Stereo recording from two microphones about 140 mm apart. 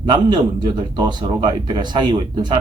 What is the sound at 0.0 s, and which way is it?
Speech, 30° right (ahead or behind).